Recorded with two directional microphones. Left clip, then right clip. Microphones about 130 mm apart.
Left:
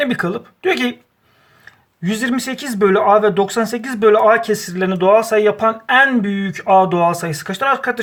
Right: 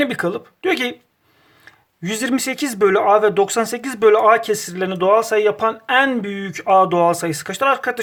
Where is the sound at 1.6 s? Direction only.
50° right (ahead or behind).